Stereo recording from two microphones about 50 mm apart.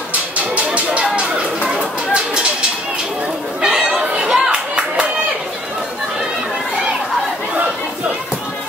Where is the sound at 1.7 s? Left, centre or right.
Centre.